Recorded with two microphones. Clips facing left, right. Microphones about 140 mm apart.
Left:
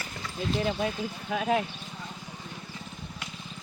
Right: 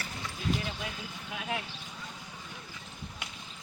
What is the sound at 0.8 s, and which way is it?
Speech, 55° left (ahead or behind).